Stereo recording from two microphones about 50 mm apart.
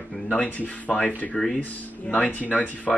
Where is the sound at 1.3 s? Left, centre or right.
Centre.